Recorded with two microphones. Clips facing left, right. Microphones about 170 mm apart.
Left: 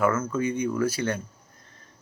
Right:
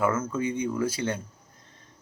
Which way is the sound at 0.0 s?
25° right (ahead or behind).